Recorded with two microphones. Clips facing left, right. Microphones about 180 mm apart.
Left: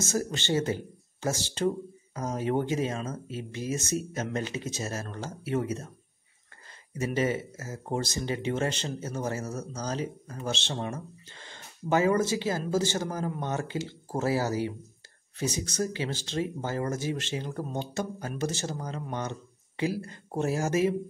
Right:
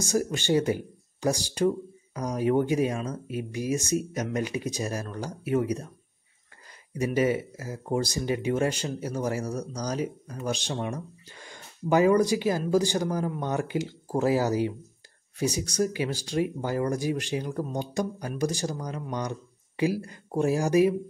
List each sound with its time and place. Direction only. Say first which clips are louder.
0.0 s speech: right 3 dB; 15° right (ahead or behind)
2.7 s speech: right 4 dB; 15° right (ahead or behind)
7.2 s speech: right 4 dB; 10° right (ahead or behind)